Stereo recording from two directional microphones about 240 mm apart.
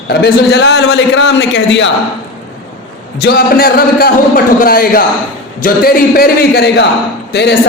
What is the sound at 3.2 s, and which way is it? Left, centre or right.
A man's voice, left.